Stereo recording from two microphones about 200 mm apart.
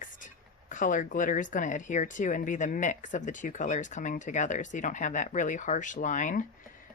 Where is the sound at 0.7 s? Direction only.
40° left (ahead or behind).